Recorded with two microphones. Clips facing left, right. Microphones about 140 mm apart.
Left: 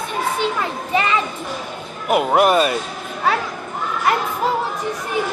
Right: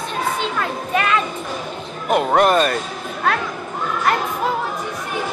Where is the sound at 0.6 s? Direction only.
15° left (ahead or behind).